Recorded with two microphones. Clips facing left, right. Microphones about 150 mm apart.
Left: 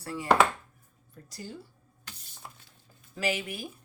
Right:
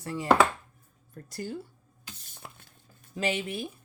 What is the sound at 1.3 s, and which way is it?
Speech, 55° right (ahead or behind).